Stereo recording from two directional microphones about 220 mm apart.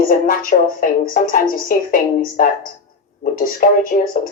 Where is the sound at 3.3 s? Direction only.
40° left (ahead or behind).